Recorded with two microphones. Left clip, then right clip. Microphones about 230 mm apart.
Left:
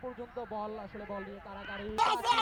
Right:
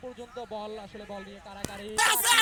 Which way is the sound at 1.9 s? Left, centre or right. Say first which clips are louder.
Right 4 dB; centre.